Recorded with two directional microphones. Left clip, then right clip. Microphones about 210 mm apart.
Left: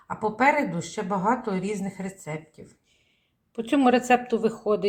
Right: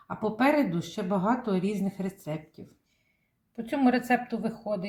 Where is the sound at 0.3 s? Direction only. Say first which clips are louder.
Left 3 dB; 25° left (ahead or behind).